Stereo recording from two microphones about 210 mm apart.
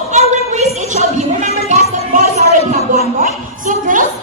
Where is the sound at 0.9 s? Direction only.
30° left (ahead or behind).